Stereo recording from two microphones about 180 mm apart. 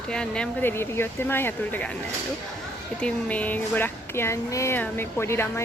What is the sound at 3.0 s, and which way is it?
Speech, 10° left (ahead or behind).